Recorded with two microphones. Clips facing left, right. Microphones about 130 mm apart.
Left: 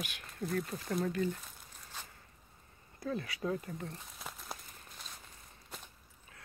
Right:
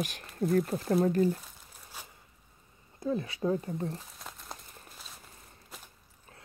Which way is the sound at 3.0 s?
25° right (ahead or behind).